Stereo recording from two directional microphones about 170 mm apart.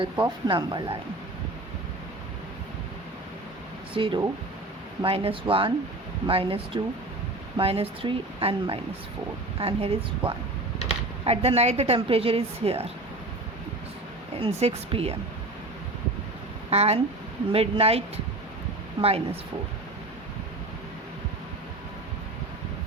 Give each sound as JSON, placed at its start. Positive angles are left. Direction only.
{"t": 0.0, "sound": "speech", "side_deg": -30}
{"t": 3.9, "sound": "a woman's voice", "side_deg": -30}
{"t": 11.3, "sound": "a woman's voice", "side_deg": -40}
{"t": 14.3, "sound": "a woman's voice", "side_deg": -35}
{"t": 16.6, "sound": "a woman's voice", "side_deg": -35}
{"t": 19.0, "sound": "a woman's voice", "side_deg": -35}